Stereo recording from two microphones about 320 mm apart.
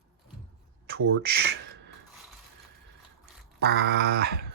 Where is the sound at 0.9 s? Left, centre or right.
Right.